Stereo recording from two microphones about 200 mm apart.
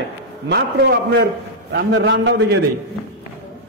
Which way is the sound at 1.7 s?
55° right (ahead or behind).